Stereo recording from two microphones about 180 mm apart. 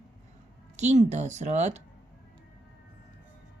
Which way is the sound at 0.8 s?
40° right (ahead or behind).